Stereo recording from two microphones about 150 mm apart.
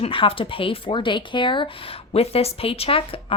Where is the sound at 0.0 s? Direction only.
35° left (ahead or behind).